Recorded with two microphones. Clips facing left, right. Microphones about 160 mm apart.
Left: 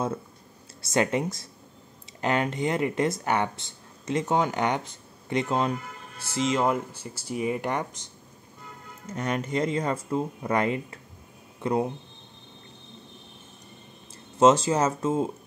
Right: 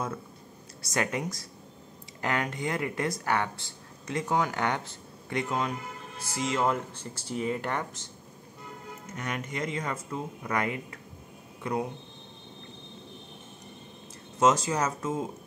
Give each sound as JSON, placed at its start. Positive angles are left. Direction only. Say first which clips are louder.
{"t": 0.8, "sound": "speech", "louder": "left 6 dB", "side_deg": 25}
{"t": 9.1, "sound": "speech", "louder": "left 7 dB", "side_deg": 30}
{"t": 14.4, "sound": "speech", "louder": "left 5 dB", "side_deg": 25}